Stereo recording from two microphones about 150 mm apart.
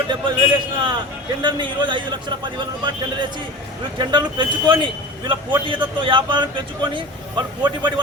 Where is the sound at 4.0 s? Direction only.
30° right (ahead or behind).